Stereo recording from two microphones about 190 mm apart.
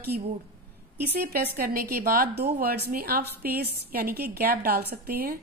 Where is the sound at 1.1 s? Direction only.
55° right (ahead or behind).